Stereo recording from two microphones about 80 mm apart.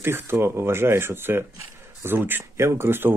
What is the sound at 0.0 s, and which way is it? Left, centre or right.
Speech, right.